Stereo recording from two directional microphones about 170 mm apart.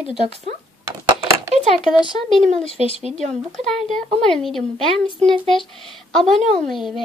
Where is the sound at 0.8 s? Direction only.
15° right (ahead or behind).